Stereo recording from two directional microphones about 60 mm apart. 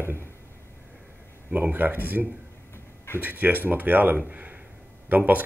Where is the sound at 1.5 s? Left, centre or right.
Right.